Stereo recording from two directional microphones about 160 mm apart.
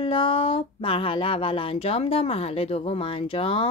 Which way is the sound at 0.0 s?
35° left (ahead or behind).